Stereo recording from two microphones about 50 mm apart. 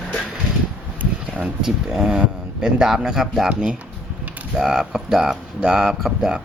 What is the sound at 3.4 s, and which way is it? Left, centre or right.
Speech, centre.